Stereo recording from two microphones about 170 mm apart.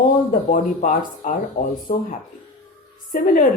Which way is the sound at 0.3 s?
55° left (ahead or behind).